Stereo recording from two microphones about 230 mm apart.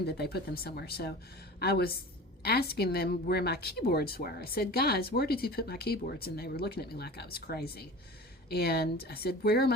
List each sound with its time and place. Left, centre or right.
0.0 s a woman's voice: left